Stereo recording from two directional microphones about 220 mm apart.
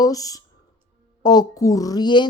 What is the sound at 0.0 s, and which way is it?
Speech, 15° left (ahead or behind).